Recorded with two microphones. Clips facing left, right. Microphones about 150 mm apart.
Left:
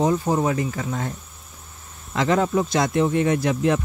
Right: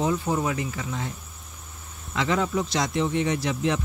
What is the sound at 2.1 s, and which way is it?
Speech, 45° left (ahead or behind).